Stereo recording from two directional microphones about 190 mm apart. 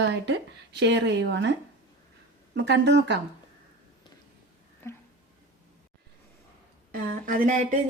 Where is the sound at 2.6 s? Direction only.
65° right (ahead or behind).